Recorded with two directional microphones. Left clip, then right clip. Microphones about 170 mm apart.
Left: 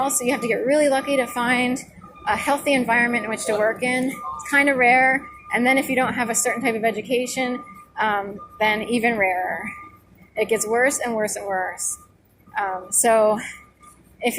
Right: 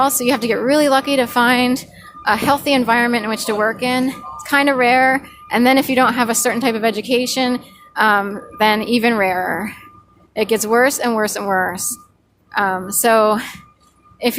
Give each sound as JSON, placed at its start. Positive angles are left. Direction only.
{"t": 0.0, "sound": "a woman's voice", "side_deg": -45}